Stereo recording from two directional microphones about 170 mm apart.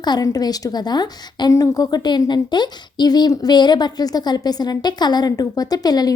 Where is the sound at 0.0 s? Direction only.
25° left (ahead or behind).